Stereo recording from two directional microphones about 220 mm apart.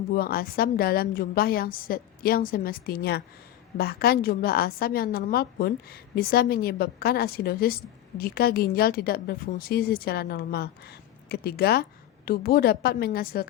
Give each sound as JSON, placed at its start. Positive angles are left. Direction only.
{"t": 0.1, "sound": "a woman's voice", "side_deg": 45}